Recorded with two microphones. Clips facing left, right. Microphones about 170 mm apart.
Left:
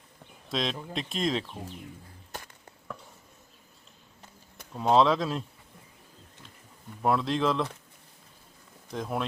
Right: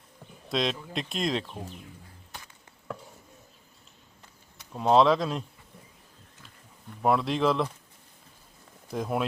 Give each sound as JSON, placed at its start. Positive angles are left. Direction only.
{"t": 0.5, "sound": "speech", "side_deg": 0}
{"t": 4.7, "sound": "speech", "side_deg": 0}
{"t": 7.0, "sound": "speech", "side_deg": 0}
{"t": 8.9, "sound": "speech", "side_deg": -5}